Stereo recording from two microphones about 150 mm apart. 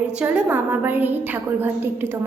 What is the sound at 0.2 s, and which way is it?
A woman's voice, 10° right (ahead or behind).